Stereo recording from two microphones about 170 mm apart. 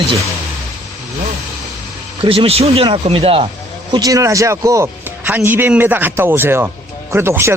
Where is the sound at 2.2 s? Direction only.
35° right (ahead or behind).